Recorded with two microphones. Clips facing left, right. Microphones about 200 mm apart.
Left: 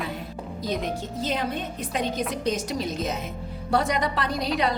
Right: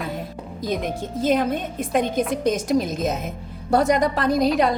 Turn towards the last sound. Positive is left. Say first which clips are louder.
# right 8 dB
turn(degrees=-45)  # may be behind; listen again after turning